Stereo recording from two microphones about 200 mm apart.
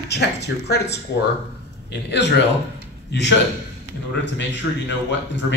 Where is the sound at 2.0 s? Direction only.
60° left (ahead or behind).